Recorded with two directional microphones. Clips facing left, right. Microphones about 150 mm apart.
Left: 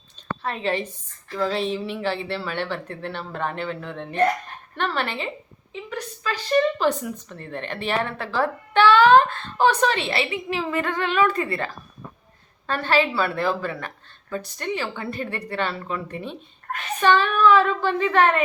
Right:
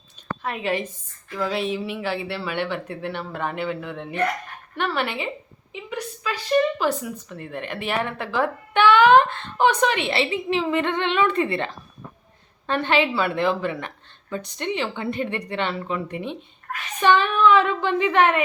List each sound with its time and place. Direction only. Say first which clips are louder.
0.4 s a woman's voice: even; 10° right (ahead or behind)